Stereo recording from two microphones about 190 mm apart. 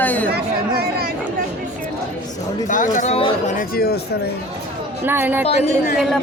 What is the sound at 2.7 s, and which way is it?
Speech, 40° left (ahead or behind).